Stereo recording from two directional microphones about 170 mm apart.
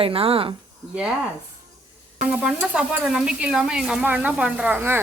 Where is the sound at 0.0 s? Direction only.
35° right (ahead or behind).